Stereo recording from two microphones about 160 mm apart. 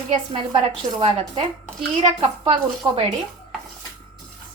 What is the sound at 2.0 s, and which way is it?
A woman's voice, 35° right (ahead or behind).